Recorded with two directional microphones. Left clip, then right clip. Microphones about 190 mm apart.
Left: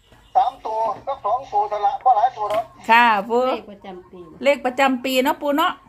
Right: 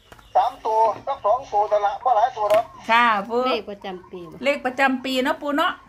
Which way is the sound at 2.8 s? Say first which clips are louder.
Left 3 dB; 30° left (ahead or behind).